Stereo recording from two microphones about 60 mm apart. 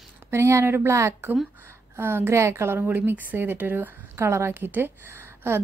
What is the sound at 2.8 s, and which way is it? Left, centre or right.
Speech, right.